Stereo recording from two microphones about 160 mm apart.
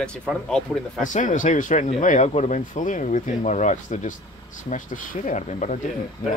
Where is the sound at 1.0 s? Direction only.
50° left (ahead or behind).